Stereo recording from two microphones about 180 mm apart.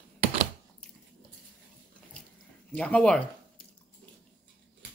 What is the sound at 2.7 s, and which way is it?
Speech, 5° left (ahead or behind).